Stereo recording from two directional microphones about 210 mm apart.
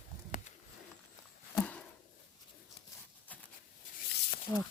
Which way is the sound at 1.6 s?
5° left (ahead or behind).